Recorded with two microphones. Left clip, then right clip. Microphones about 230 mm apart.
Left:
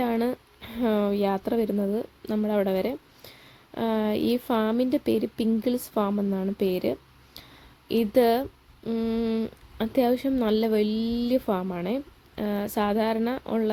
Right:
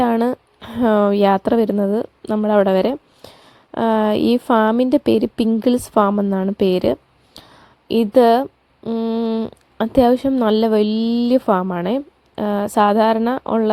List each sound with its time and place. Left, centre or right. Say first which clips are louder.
0.0 s a woman's voice: right 9 dB; right